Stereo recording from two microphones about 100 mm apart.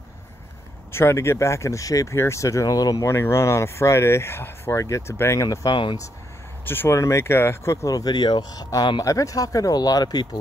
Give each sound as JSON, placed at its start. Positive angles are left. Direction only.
{"t": 0.9, "sound": "speech", "side_deg": 25}
{"t": 3.1, "sound": "speech", "side_deg": 25}
{"t": 6.6, "sound": "speech", "side_deg": 20}